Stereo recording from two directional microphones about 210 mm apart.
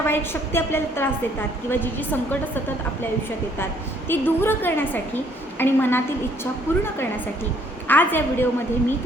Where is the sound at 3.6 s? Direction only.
10° left (ahead or behind).